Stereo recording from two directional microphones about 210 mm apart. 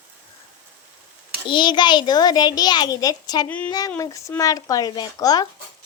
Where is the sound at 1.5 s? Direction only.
20° left (ahead or behind).